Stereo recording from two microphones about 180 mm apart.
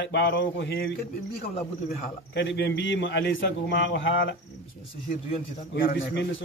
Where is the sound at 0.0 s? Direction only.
85° left.